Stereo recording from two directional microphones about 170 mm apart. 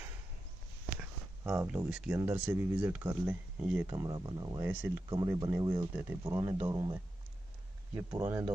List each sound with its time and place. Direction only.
1.5 s speech: 5° right (ahead or behind)
3.9 s speech: 25° right (ahead or behind)
7.9 s speech: 15° right (ahead or behind)